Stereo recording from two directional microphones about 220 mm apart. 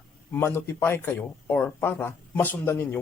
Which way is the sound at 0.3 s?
10° left (ahead or behind).